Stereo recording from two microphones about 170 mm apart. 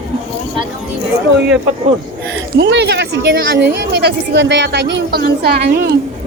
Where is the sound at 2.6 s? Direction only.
90° right; by 5.9 s 65° right (ahead or behind).